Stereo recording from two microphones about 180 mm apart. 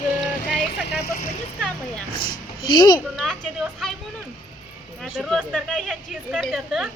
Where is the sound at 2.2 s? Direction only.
25° left (ahead or behind).